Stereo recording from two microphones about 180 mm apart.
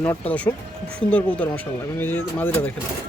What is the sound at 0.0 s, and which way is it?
Speech, 10° left (ahead or behind).